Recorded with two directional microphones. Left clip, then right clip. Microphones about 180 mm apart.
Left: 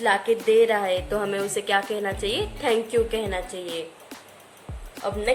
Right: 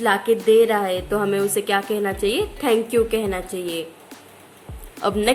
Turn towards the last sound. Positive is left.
turn(degrees=0)  # may be behind; listen again after turning